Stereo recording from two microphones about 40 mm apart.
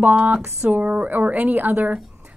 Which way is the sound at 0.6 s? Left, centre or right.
Right.